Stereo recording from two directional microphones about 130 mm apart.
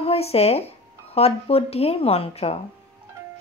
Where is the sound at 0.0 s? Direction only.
50° left (ahead or behind).